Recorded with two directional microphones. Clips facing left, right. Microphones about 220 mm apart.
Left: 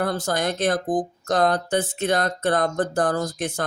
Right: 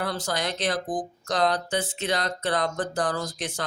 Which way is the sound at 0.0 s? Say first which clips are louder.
Left 5 dB; 50° left (ahead or behind).